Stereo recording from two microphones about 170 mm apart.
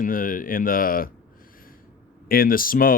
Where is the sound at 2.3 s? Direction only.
60° left (ahead or behind).